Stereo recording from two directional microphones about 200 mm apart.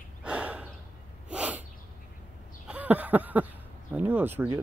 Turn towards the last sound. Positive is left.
turn(degrees=-10)  # may be behind; listen again after turning